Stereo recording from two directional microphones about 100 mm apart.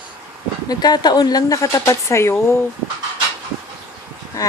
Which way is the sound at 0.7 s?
40° left (ahead or behind).